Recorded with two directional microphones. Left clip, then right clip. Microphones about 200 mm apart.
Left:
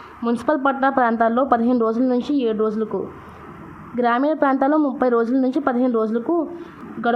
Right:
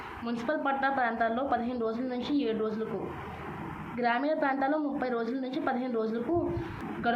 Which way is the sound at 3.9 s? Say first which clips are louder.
Left 10 dB; 50° left (ahead or behind).